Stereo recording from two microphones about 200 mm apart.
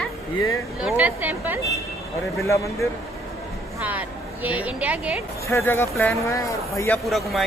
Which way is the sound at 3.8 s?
10° right (ahead or behind).